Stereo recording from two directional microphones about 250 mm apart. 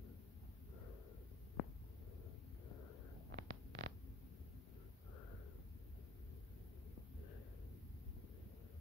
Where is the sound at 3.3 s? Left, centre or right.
Right.